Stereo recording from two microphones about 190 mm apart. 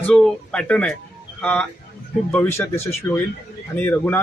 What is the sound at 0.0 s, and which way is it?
Speech, 5° left (ahead or behind).